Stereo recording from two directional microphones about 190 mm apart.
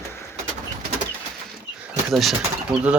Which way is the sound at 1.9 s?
Centre (ahead or behind).